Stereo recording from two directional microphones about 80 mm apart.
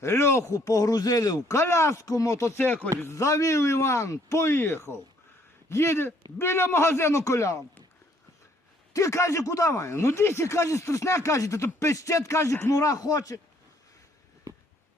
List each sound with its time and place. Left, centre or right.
0.0 s speech: left
2.6 s speech: left
3.0 s speech: left
8.9 s speech: left